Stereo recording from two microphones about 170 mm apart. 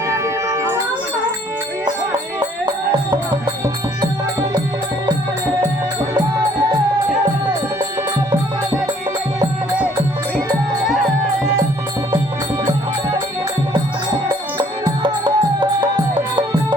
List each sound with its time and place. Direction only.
0.1 s music: 20° right (ahead or behind)
14.6 s music: 25° right (ahead or behind)